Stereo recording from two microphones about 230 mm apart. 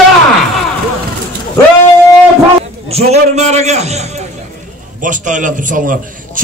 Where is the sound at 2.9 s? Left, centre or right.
Right.